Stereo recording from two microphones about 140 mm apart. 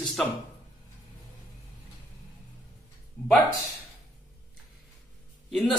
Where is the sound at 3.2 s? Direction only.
10° left (ahead or behind).